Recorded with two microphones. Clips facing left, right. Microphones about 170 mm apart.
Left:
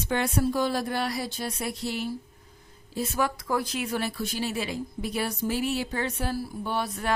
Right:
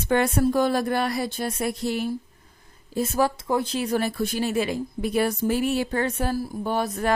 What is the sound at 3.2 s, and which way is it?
Speech, 25° right (ahead or behind).